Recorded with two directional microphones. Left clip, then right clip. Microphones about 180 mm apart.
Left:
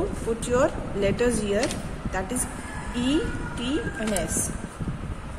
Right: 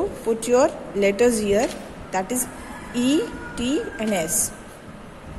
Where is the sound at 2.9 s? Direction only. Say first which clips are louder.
Right 4 dB; 30° right (ahead or behind).